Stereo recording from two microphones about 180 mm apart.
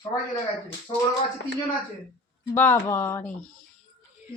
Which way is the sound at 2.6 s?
10° left (ahead or behind).